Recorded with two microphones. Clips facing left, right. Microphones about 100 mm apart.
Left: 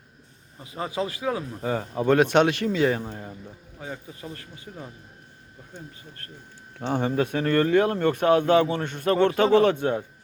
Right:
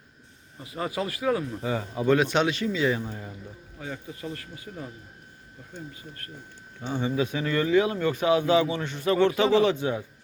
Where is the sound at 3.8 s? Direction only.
20° left (ahead or behind).